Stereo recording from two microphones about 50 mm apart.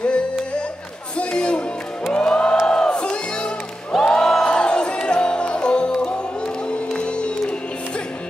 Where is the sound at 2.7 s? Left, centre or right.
Centre.